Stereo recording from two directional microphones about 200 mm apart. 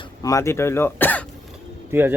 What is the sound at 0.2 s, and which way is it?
Speech, 15° left (ahead or behind).